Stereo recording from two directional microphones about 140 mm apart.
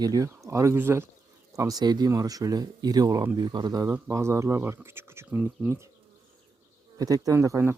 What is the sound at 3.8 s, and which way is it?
Speech, 15° right (ahead or behind).